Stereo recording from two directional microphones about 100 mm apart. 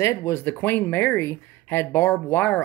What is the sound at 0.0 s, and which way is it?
Speech, 30° left (ahead or behind).